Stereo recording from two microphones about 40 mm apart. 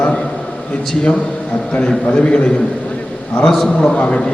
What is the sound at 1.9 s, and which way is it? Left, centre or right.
Speech, left.